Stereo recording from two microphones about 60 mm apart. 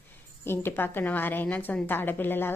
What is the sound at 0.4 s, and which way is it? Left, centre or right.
A woman's voice, left.